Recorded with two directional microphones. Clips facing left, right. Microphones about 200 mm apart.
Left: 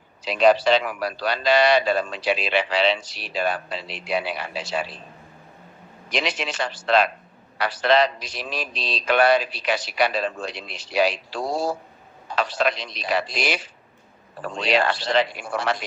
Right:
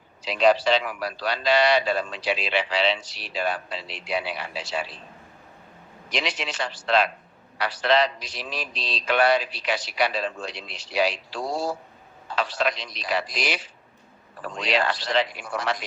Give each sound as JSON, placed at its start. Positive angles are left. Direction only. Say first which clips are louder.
{"t": 0.2, "sound": "a man's voice", "louder": "left 2 dB", "side_deg": 50}
{"t": 6.1, "sound": "a man's voice", "louder": "left 3 dB", "side_deg": 50}
{"t": 14.7, "sound": "a man's voice", "louder": "left 3 dB", "side_deg": 50}